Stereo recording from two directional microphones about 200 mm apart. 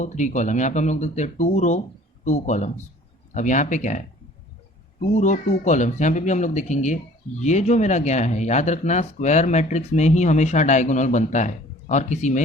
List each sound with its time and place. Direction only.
0.0 s speech: 35° left (ahead or behind)